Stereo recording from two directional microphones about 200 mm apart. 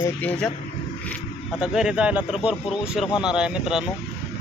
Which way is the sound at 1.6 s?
5° right (ahead or behind).